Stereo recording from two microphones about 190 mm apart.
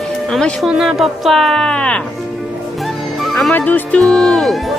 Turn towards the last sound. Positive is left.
turn(degrees=0)  # may be behind; listen again after turning